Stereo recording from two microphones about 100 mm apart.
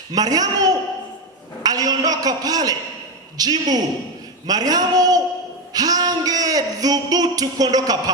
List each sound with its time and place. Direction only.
0.1 s a man's voice: 40° right (ahead or behind)